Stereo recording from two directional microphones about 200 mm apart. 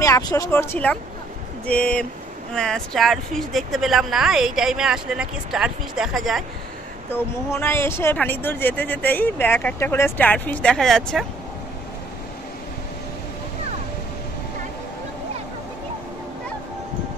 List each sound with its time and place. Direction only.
0.0 s speech: 20° left (ahead or behind); by 6.4 s centre (ahead or behind)
7.5 s speech: 10° left (ahead or behind)